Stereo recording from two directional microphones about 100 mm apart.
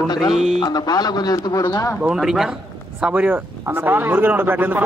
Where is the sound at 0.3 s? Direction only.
Centre (ahead or behind).